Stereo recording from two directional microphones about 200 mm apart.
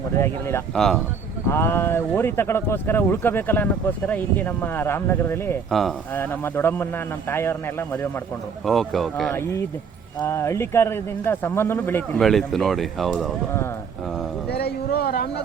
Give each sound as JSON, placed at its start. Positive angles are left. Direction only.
{"t": 0.2, "sound": "speech", "side_deg": 10}
{"t": 8.6, "sound": "speech", "side_deg": 0}
{"t": 9.3, "sound": "speech", "side_deg": 15}
{"t": 14.5, "sound": "speech", "side_deg": 50}